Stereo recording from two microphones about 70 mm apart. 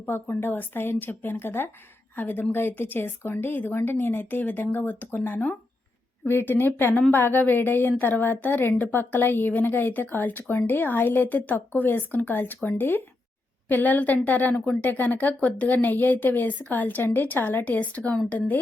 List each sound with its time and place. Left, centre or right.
0.0 s a woman's voice: left; by 14.8 s centre
14.8 s a woman's voice: left